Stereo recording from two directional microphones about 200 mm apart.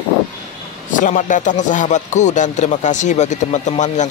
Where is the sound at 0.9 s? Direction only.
40° left (ahead or behind).